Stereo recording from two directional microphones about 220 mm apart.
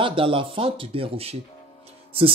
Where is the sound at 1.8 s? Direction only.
25° right (ahead or behind).